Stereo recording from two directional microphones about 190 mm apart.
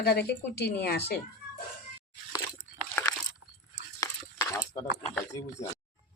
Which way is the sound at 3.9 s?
15° left (ahead or behind).